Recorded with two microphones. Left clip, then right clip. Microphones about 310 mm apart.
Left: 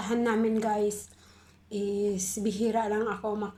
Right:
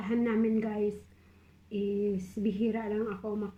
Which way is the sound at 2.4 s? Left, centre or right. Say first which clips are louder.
Left 5 dB; left.